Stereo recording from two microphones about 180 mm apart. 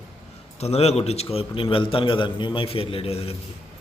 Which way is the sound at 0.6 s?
35° left (ahead or behind).